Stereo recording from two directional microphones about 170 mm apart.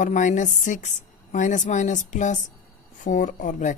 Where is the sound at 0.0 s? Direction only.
50° left (ahead or behind).